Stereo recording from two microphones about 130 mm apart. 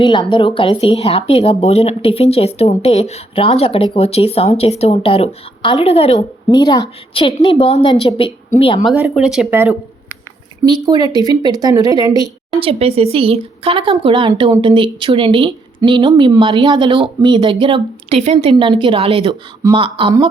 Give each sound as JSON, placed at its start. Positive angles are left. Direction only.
{"t": 0.0, "sound": "speech", "side_deg": 40}
{"t": 6.5, "sound": "speech", "side_deg": 35}
{"t": 7.1, "sound": "speech", "side_deg": 45}
{"t": 8.9, "sound": "speech", "side_deg": -5}
{"t": 9.5, "sound": "speech", "side_deg": -15}
{"t": 10.7, "sound": "speech", "side_deg": -30}
{"t": 12.5, "sound": "speech", "side_deg": -45}
{"t": 18.2, "sound": "a woman's voice", "side_deg": -60}
{"t": 18.6, "sound": "speech", "side_deg": -40}